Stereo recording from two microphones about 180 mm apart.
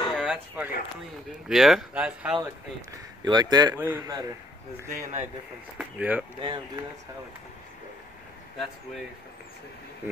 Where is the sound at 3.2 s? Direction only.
20° right (ahead or behind).